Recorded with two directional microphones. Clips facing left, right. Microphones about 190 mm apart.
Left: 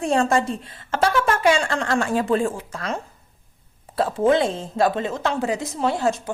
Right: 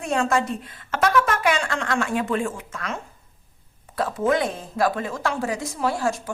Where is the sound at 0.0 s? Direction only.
30° left (ahead or behind).